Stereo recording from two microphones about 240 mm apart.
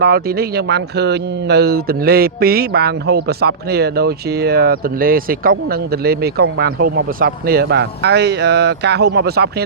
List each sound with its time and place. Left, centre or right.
0.0 s speech: right